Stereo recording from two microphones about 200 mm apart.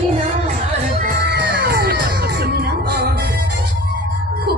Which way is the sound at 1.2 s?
55° right (ahead or behind).